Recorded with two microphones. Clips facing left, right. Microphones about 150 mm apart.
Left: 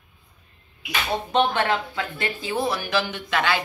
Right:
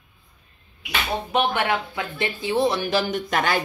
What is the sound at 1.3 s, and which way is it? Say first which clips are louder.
Speech: left 1 dB; 15° right (ahead or behind).